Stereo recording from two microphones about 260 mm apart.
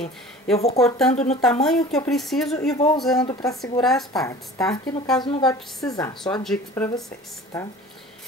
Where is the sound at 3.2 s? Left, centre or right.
Centre.